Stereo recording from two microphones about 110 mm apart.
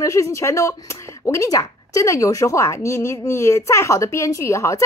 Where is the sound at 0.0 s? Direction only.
25° left (ahead or behind).